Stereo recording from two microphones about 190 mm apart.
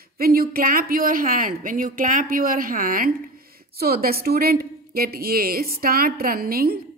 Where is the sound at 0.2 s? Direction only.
50° right (ahead or behind).